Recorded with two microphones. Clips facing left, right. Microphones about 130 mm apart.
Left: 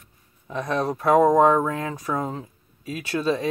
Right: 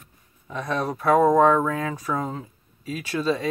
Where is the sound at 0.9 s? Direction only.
20° left (ahead or behind).